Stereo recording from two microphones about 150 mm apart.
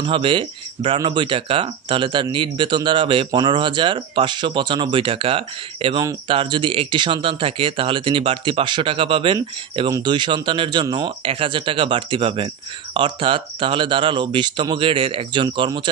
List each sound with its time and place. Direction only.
0.0 s speech: 35° right (ahead or behind)